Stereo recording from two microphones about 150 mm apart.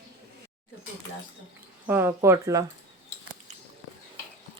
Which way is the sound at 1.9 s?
15° right (ahead or behind).